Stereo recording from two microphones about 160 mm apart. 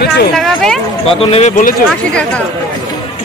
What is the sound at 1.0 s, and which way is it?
Speech, 40° left (ahead or behind).